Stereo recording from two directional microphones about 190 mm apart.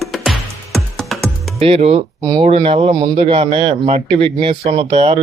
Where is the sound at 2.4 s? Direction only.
30° right (ahead or behind).